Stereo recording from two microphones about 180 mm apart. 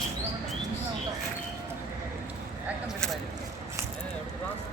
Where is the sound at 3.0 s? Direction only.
5° left (ahead or behind).